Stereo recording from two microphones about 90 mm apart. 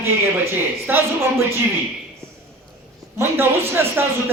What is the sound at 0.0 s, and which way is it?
Speech, 25° right (ahead or behind).